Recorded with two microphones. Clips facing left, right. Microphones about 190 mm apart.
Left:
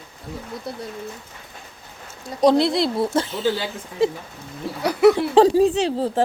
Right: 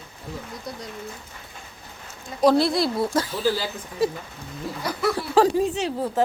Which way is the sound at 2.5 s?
20° left (ahead or behind).